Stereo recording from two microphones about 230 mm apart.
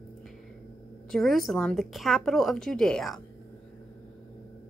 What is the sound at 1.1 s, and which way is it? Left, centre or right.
Speech, centre.